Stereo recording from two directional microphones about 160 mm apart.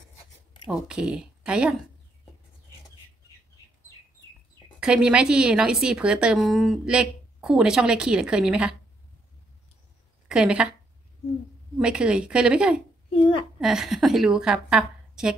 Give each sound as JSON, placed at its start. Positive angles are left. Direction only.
{"t": 0.7, "sound": "a woman's voice", "side_deg": -5}
{"t": 4.7, "sound": "a woman's voice", "side_deg": -5}
{"t": 10.2, "sound": "speech", "side_deg": -5}
{"t": 11.8, "sound": "a woman's voice", "side_deg": -5}
{"t": 13.1, "sound": "a child's voice", "side_deg": 35}
{"t": 13.6, "sound": "a woman's voice", "side_deg": -5}